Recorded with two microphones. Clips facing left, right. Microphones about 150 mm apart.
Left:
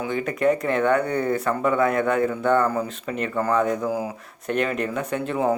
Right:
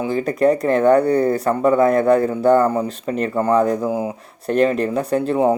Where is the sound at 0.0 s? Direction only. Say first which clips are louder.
Right 5 dB; 35° right (ahead or behind).